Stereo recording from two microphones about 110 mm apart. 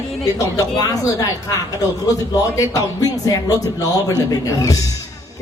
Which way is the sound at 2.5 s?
35° left (ahead or behind).